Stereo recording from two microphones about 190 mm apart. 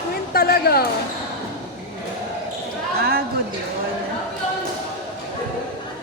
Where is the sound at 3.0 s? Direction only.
55° right (ahead or behind).